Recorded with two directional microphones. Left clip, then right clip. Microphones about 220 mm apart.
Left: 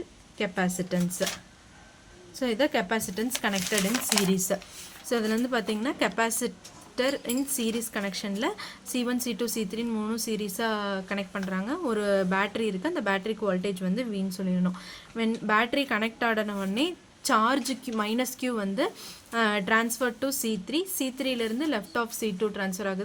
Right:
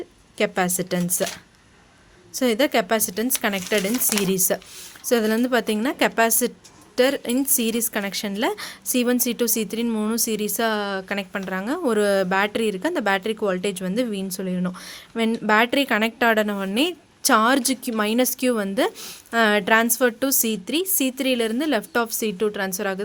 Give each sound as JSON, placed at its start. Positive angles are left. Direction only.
{"t": 0.3, "sound": "a woman's voice", "side_deg": -50}
{"t": 2.3, "sound": "a woman's voice", "side_deg": -50}